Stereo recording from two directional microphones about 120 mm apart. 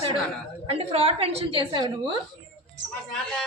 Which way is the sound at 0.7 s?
55° right (ahead or behind).